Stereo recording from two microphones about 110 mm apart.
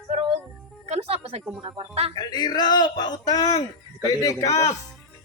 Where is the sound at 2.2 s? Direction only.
40° left (ahead or behind).